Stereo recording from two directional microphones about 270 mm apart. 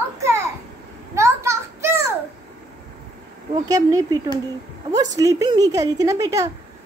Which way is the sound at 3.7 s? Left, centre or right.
Centre.